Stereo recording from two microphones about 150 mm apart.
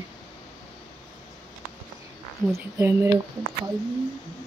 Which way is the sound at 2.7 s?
20° right (ahead or behind).